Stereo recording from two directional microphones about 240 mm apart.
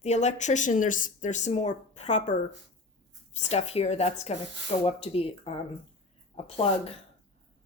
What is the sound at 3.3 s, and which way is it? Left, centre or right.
Speech, left.